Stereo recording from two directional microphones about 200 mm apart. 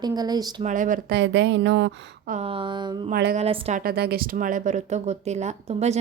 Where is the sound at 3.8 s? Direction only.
50° right (ahead or behind).